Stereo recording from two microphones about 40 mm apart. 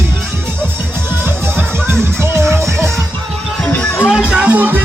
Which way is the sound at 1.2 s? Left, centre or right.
Right.